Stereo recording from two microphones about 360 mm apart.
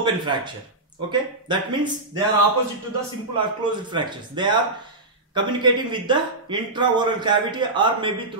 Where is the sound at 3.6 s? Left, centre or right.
Centre.